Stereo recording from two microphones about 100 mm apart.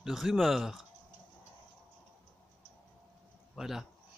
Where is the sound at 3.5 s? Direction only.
5° right (ahead or behind).